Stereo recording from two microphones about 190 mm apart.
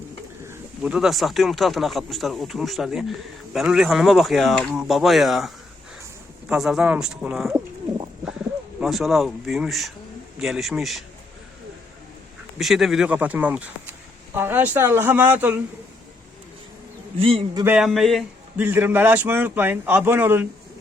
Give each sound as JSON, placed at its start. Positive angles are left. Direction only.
{"t": 0.4, "sound": "speech", "side_deg": -5}
{"t": 6.5, "sound": "speech", "side_deg": -5}
{"t": 7.5, "sound": "bird", "side_deg": -10}
{"t": 8.8, "sound": "speech", "side_deg": 0}
{"t": 12.5, "sound": "a man's voice", "side_deg": 0}
{"t": 17.2, "sound": "a man's voice", "side_deg": -30}
{"t": 17.6, "sound": "a man's voice", "side_deg": -5}